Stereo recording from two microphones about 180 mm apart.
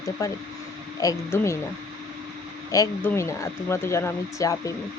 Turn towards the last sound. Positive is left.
turn(degrees=15)  # may be behind; listen again after turning